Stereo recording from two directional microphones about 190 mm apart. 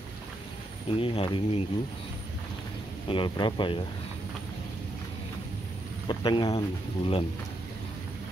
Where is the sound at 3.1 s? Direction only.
25° left (ahead or behind).